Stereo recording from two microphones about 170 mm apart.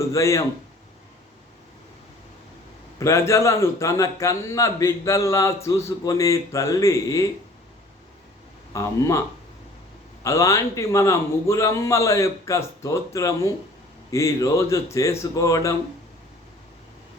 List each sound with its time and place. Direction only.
0.0 s a man's voice: 15° left (ahead or behind)
3.0 s a man's voice: 15° left (ahead or behind)
8.7 s speech: 20° left (ahead or behind)
10.2 s a man's voice: 20° left (ahead or behind)